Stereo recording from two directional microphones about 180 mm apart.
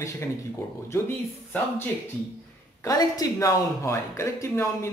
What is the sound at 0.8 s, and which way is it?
Speech, 15° left (ahead or behind).